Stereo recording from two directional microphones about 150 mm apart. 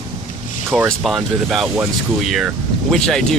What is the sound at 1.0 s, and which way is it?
Speech, centre (ahead or behind).